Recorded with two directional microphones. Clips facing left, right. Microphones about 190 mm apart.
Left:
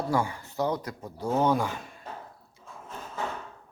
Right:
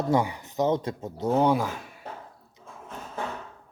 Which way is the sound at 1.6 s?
Centre (ahead or behind).